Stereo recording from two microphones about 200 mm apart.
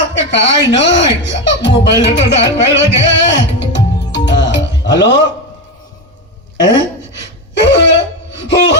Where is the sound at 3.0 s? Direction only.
60° left (ahead or behind).